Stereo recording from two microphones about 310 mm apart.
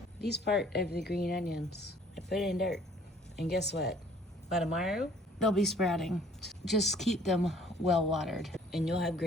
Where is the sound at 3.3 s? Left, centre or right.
Left.